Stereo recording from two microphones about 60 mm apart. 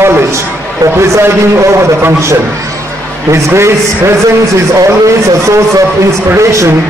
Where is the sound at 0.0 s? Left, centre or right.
Right.